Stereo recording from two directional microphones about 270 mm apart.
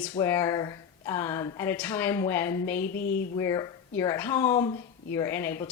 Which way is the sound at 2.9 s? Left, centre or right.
Left.